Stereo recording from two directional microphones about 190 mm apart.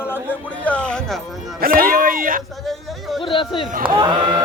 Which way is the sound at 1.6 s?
50° right (ahead or behind).